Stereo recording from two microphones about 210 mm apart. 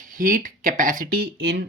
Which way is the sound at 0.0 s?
40° right (ahead or behind).